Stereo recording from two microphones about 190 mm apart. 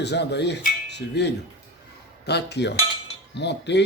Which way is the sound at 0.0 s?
65° left (ahead or behind).